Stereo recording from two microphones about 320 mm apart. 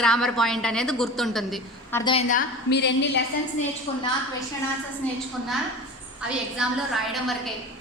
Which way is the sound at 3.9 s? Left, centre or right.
Centre.